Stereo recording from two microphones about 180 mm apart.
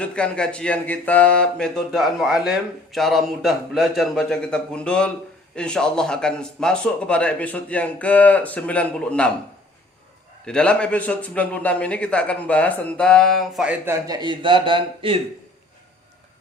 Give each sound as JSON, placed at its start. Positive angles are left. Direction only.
{"t": 0.0, "sound": "speech", "side_deg": 5}
{"t": 10.4, "sound": "speech", "side_deg": 5}
{"t": 13.8, "sound": "a man's voice", "side_deg": -20}